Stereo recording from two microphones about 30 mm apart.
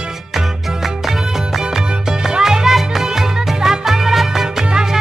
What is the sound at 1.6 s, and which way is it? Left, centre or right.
Music, centre.